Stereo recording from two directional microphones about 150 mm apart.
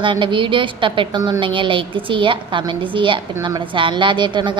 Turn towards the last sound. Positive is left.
turn(degrees=-30)  # may be behind; listen again after turning